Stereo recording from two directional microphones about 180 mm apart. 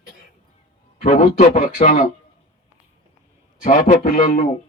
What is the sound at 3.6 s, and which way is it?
Speech, 40° left (ahead or behind).